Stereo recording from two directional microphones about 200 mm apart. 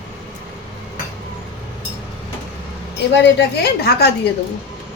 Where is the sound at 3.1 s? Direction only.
60° left (ahead or behind).